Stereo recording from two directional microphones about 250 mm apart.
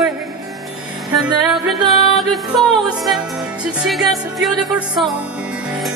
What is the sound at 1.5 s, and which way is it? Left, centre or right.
Music, centre.